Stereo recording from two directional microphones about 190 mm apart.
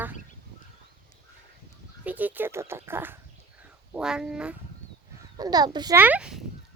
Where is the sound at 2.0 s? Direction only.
10° right (ahead or behind).